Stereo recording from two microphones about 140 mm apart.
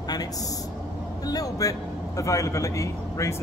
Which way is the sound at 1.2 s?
25° left (ahead or behind).